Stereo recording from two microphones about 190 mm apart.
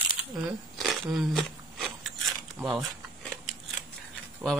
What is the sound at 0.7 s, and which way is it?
Crunch, centre (ahead or behind).